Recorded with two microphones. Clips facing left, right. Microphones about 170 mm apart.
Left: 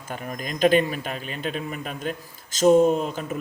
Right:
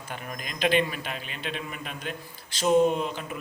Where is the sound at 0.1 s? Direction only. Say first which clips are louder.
Left 6 dB; 40° left (ahead or behind).